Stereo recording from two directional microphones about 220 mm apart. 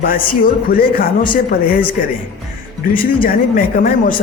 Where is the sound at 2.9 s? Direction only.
40° left (ahead or behind).